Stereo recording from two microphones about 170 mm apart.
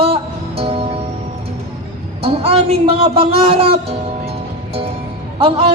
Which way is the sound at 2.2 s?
35° right (ahead or behind).